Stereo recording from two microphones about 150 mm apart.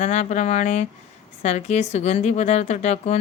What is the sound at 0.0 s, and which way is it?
Speech, 50° left (ahead or behind).